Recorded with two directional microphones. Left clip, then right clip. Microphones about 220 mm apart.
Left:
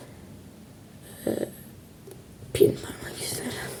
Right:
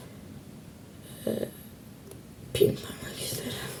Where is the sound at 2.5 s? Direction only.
10° left (ahead or behind).